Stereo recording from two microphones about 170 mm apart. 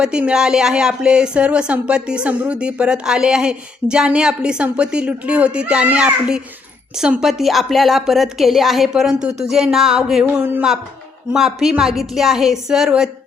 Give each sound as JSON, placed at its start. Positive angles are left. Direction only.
{"t": 0.0, "sound": "speech", "side_deg": -5}